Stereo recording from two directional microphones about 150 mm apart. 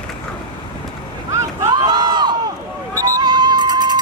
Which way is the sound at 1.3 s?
25° right (ahead or behind).